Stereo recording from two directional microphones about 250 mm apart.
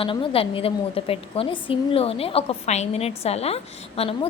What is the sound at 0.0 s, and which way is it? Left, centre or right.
A woman's voice, left.